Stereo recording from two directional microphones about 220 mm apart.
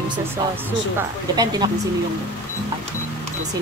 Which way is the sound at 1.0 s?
15° right (ahead or behind).